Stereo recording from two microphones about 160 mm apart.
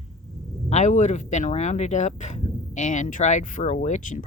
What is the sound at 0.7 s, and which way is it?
Speech, 45° left (ahead or behind).